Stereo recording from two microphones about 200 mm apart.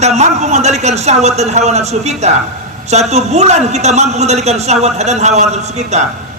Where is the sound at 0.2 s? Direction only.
35° right (ahead or behind).